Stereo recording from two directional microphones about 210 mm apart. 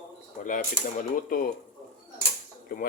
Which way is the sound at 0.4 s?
40° left (ahead or behind).